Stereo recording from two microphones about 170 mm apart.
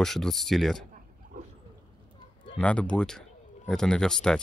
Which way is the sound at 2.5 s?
10° left (ahead or behind).